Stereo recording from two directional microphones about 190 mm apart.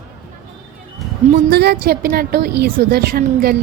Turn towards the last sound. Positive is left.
turn(degrees=-50)  # may be behind; listen again after turning